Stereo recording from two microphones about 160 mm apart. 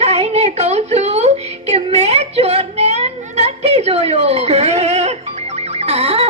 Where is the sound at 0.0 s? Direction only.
40° right (ahead or behind).